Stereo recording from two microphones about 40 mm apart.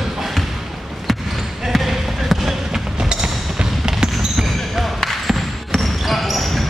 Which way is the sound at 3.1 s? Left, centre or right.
Right.